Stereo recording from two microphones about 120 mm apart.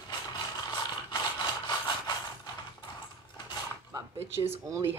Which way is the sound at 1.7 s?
35° left (ahead or behind).